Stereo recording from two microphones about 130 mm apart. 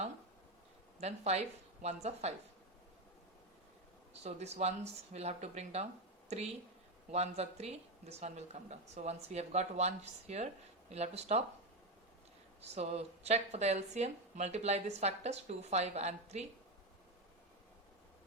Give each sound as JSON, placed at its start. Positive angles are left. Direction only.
{"t": 1.0, "sound": "speech", "side_deg": -55}
{"t": 4.1, "sound": "speech", "side_deg": -55}
{"t": 12.7, "sound": "speech", "side_deg": -55}